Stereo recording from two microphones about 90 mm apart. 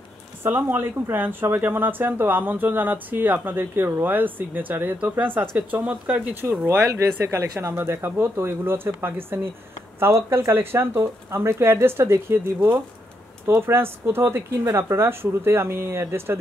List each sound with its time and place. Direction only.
0.4 s speech: 25° right (ahead or behind)
13.5 s speech: 30° right (ahead or behind)